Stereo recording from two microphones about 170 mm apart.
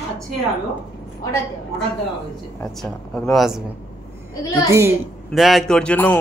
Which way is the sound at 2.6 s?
5° left (ahead or behind).